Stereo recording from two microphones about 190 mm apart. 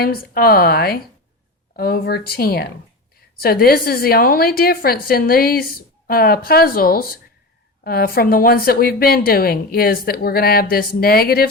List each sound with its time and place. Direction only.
0.0 s a woman's voice: 50° left (ahead or behind)